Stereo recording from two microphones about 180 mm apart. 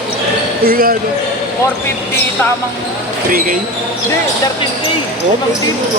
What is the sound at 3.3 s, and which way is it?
Speech, 50° right (ahead or behind).